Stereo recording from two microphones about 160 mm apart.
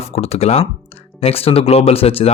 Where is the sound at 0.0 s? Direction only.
40° left (ahead or behind).